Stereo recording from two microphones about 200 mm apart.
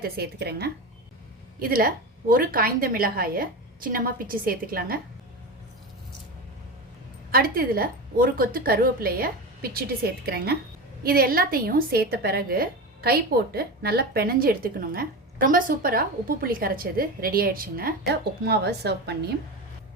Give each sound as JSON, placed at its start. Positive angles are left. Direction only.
{"t": 0.0, "sound": "a woman's voice", "side_deg": -55}
{"t": 7.3, "sound": "a woman's voice", "side_deg": -45}